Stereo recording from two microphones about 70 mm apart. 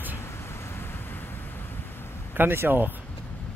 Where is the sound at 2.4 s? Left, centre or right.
Right.